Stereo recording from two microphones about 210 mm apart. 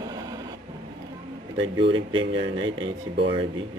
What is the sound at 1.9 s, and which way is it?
Speech, 25° right (ahead or behind).